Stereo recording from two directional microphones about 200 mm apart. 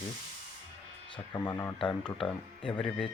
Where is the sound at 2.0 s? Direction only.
5° left (ahead or behind).